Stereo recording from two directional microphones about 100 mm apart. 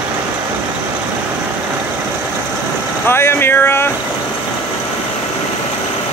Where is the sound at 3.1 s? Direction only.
25° left (ahead or behind).